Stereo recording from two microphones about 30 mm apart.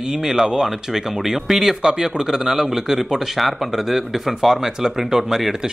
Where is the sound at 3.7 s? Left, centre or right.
Centre.